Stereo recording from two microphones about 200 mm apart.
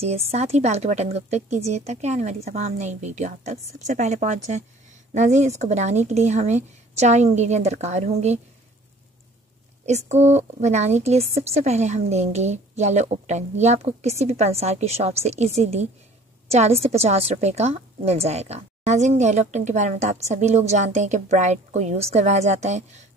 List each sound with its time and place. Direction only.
0.0 s a woman's voice: 30° right (ahead or behind)
9.8 s a woman's voice: 35° right (ahead or behind)